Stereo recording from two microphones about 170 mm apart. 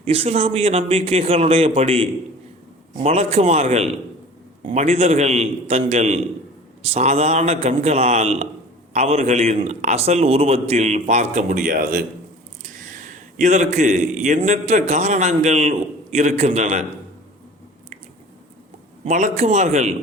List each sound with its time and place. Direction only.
0.0 s a man's voice: 35° right (ahead or behind)
11.4 s a man's voice: 55° right (ahead or behind)
19.0 s a man's voice: 45° right (ahead or behind)